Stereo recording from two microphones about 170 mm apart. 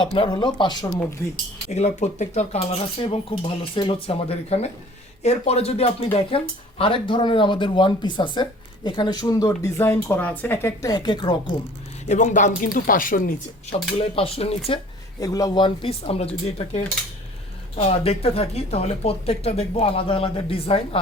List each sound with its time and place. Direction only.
0.0 s speech: 30° left (ahead or behind)
1.7 s speech: 45° left (ahead or behind); by 11.3 s 25° left (ahead or behind)
12.0 s speech: 45° left (ahead or behind)
14.0 s speech: 35° left (ahead or behind)
15.2 s speech: 20° left (ahead or behind)